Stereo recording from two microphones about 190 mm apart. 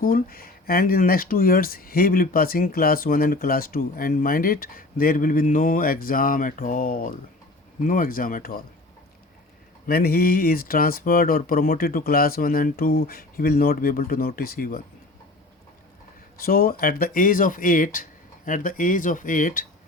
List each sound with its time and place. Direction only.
0.0 s speech: 50° left (ahead or behind)
9.8 s speech: 55° left (ahead or behind)
16.4 s speech: 50° left (ahead or behind)